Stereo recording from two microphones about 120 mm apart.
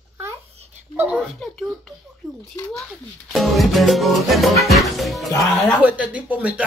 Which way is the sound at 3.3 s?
Centre (ahead or behind).